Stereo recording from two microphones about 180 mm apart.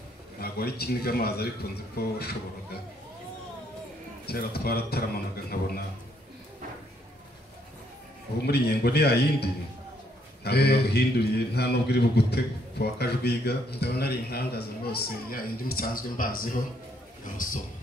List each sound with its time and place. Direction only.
0.4 s a man's voice: 60° left (ahead or behind)
4.3 s a man's voice: 60° left (ahead or behind)
8.4 s a man's voice: 65° left (ahead or behind)